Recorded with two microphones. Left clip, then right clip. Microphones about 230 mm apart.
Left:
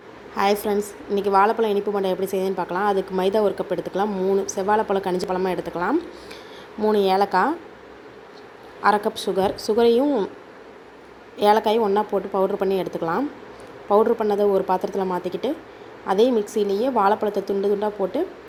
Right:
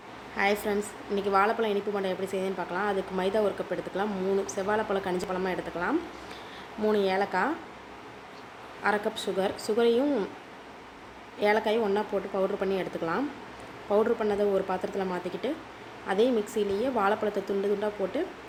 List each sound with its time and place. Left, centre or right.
0.3 s a woman's voice: centre
8.8 s a woman's voice: left
11.3 s a woman's voice: left